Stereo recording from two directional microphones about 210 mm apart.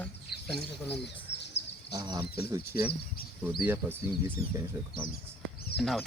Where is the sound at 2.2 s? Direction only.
50° left (ahead or behind).